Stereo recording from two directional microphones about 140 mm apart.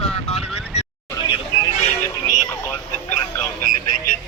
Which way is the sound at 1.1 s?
30° left (ahead or behind).